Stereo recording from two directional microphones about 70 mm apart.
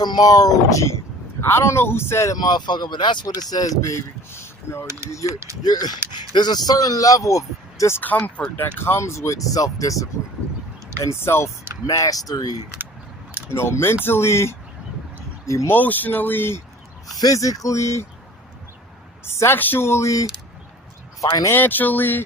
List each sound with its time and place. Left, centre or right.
0.0 s speech: left
1.4 s speech: left
2.3 s speech: left
4.3 s a sound: left
5.6 s speech: left
6.3 s speech: left
7.9 s speech: left
11.9 s speech: left
13.5 s speech: left
15.7 s speech: left
17.2 s speech: left
19.2 s speech: left
21.5 s speech: left